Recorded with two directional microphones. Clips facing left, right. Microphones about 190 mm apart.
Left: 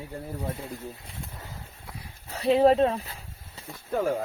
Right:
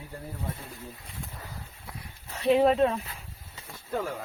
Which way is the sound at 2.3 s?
35° left (ahead or behind).